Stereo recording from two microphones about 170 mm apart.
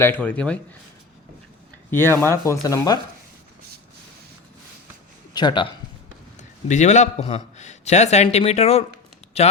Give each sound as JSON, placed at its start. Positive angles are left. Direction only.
{"t": 0.0, "sound": "speech", "side_deg": 10}
{"t": 1.9, "sound": "speech", "side_deg": 15}
{"t": 5.3, "sound": "a man's voice", "side_deg": 25}
{"t": 6.7, "sound": "speech", "side_deg": 45}